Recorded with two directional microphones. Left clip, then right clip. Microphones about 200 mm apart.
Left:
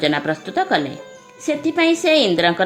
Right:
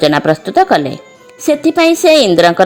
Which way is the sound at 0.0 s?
45° right (ahead or behind).